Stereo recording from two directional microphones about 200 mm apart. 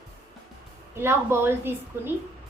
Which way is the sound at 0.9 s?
10° right (ahead or behind).